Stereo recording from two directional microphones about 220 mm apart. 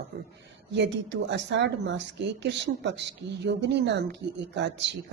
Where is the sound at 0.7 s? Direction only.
55° right (ahead or behind).